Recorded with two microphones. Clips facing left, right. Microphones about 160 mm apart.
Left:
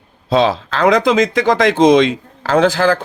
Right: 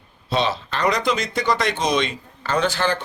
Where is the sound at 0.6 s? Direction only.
90° left.